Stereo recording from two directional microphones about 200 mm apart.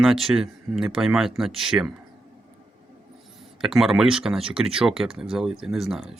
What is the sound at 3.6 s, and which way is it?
Speech, centre (ahead or behind).